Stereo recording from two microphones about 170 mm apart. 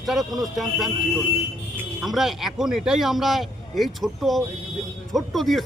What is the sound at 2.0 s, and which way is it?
Speech, centre (ahead or behind).